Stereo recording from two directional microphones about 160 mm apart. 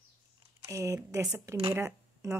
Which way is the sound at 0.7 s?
20° right (ahead or behind).